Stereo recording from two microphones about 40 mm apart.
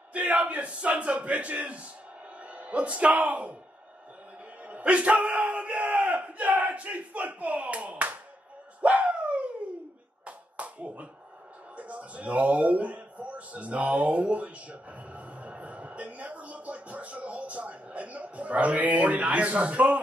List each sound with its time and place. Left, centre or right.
0.1 s speech: right
4.6 s battle cry: right
8.8 s dog: right
10.2 s clapping: right
11.7 s a sound: right